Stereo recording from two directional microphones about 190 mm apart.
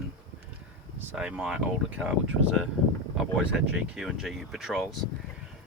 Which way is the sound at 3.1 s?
5° right (ahead or behind).